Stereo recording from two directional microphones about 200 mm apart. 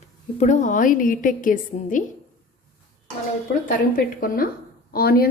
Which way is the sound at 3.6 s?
45° left (ahead or behind).